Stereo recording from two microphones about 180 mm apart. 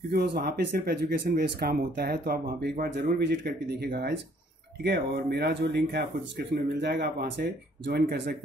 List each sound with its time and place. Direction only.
0.1 s speech: 60° right (ahead or behind)